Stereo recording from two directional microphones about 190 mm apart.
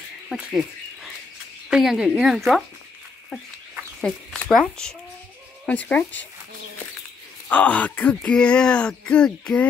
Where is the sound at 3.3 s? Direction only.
5° left (ahead or behind).